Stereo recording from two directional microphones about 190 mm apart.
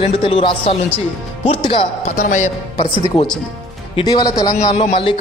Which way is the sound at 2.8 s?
25° left (ahead or behind).